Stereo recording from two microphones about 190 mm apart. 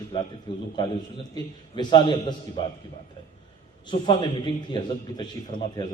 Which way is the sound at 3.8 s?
25° left (ahead or behind).